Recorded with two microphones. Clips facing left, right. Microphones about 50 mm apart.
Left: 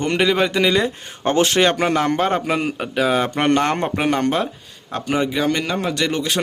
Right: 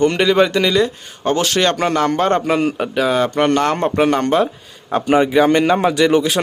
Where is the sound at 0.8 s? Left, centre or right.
Left.